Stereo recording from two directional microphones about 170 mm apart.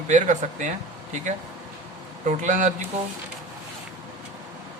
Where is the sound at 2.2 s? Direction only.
50° right (ahead or behind).